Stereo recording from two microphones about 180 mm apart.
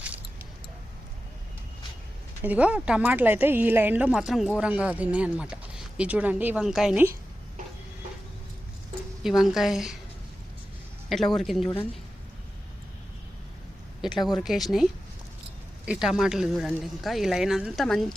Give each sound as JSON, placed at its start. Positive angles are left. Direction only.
{"t": 2.4, "sound": "speech", "side_deg": -10}
{"t": 9.2, "sound": "speech", "side_deg": 0}
{"t": 11.1, "sound": "speech", "side_deg": 0}
{"t": 14.3, "sound": "speech", "side_deg": 0}
{"t": 15.9, "sound": "speech", "side_deg": -5}